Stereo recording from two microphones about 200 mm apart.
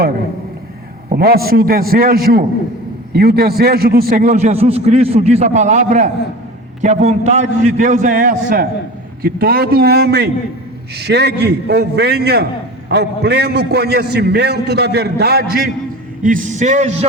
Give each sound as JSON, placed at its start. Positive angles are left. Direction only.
{"t": 1.1, "sound": "a man's voice", "side_deg": -50}
{"t": 16.2, "sound": "a man's voice", "side_deg": -40}